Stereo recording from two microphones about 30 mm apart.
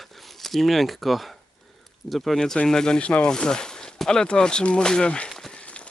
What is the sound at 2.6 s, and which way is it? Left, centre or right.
Speech, left.